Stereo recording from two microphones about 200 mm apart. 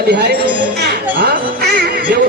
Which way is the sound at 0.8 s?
50° right (ahead or behind).